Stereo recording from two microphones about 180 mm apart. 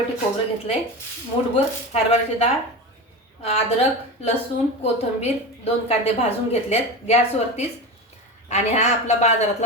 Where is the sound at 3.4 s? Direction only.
35° left (ahead or behind).